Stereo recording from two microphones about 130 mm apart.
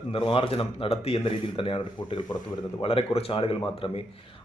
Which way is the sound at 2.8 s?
50° left (ahead or behind).